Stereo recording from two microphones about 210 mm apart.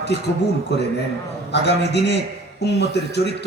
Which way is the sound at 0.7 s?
55° left (ahead or behind).